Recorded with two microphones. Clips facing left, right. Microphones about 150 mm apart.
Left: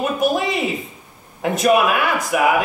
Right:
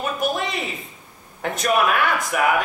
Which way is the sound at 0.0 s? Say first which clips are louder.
Left 5 dB; centre (ahead or behind).